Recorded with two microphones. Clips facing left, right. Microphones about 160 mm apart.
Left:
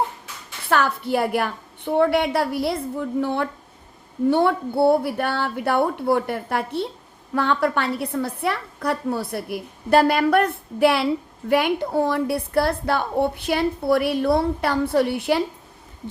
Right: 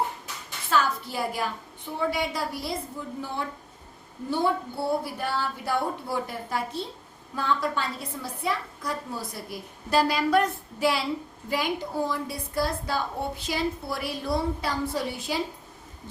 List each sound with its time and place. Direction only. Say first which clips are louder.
0.7 s a woman's voice: left 5 dB; 65° left (ahead or behind)